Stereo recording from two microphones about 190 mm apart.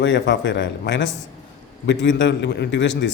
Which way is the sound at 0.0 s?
70° left (ahead or behind).